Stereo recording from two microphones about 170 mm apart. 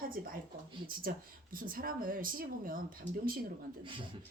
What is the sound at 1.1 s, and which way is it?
A woman's voice, 55° right (ahead or behind).